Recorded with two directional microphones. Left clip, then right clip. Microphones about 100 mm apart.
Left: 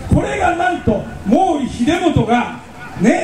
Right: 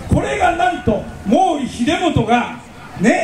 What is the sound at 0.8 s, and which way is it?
A man's voice, 25° right (ahead or behind).